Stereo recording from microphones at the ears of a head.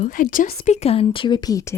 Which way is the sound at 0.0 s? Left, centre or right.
Left.